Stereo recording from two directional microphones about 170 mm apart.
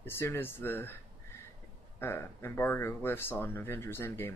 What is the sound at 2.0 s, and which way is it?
Speech, 15° left (ahead or behind).